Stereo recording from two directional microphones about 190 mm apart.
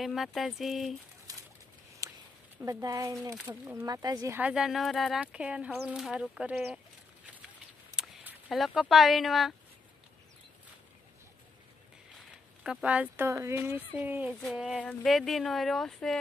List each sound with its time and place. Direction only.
0.0 s speech: centre (ahead or behind)
1.3 s bird: 20° right (ahead or behind)
2.0 s a sound: 15° right (ahead or behind)
2.6 s speech: 15° right (ahead or behind)
4.4 s speech: 5° right (ahead or behind)
7.9 s speech: 5° right (ahead or behind)
12.6 s speech: 5° right (ahead or behind)
14.3 s speech: 5° left (ahead or behind)